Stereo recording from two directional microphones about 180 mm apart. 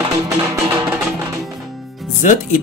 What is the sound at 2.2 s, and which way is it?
Music, 45° left (ahead or behind).